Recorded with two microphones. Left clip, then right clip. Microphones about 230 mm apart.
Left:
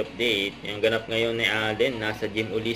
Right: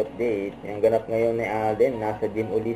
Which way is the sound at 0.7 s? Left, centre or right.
Left.